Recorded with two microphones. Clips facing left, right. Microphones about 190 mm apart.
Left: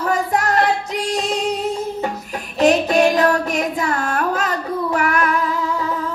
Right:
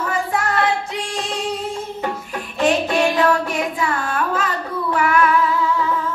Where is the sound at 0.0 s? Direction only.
40° left (ahead or behind).